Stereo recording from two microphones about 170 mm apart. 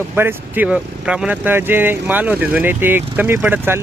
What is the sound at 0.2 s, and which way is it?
Speech, 10° right (ahead or behind).